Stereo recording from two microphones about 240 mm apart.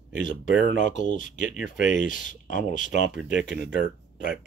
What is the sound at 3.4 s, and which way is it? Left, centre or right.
Speech, right.